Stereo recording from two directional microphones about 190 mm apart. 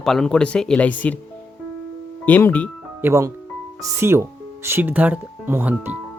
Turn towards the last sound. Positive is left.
turn(degrees=-10)  # may be behind; listen again after turning